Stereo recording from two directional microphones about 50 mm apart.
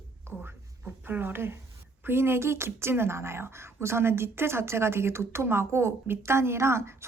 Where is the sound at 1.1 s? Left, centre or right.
Right.